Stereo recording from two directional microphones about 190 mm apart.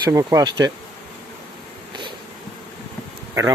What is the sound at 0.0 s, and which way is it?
Speech, 15° right (ahead or behind).